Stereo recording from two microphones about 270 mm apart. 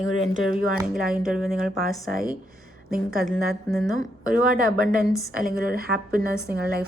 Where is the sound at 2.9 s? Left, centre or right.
Right.